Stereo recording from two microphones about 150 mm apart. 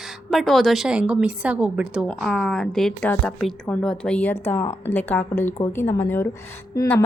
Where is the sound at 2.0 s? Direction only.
5° left (ahead or behind).